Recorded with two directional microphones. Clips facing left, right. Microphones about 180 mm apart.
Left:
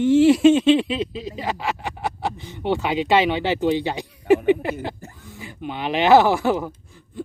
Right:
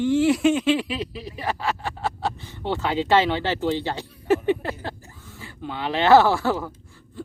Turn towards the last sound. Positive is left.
turn(degrees=15)  # may be behind; listen again after turning